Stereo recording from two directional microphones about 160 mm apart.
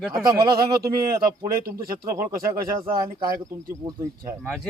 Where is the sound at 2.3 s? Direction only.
20° right (ahead or behind).